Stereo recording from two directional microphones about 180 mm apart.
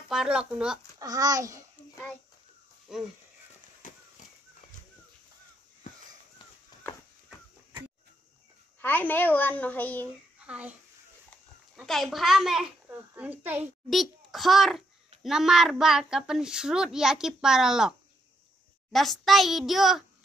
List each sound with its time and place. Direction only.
0.1 s speech: 5° right (ahead or behind)
0.9 s a child's voice: 20° right (ahead or behind)
2.9 s speech: 5° right (ahead or behind)
3.8 s a sound: 45° left (ahead or behind)
8.8 s a woman's voice: 10° left (ahead or behind)
10.4 s a child's voice: 5° right (ahead or behind)